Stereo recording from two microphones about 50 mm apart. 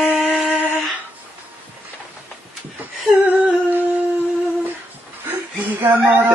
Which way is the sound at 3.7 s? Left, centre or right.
Right.